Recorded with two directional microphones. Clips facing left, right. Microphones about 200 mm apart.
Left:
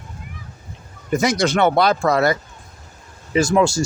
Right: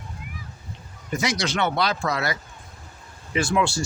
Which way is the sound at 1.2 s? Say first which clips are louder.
Left 7 dB; 50° left (ahead or behind).